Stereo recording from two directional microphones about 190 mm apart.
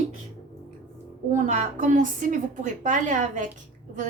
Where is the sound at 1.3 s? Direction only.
40° right (ahead or behind).